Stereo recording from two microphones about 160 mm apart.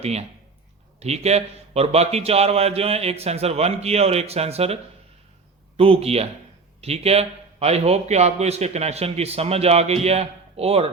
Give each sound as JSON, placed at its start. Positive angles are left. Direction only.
{"t": 0.0, "sound": "a man's voice", "side_deg": -40}